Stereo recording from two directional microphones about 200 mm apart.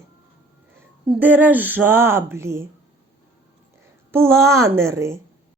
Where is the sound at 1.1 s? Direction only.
10° right (ahead or behind).